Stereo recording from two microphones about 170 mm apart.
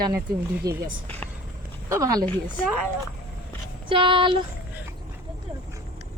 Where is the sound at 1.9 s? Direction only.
20° right (ahead or behind).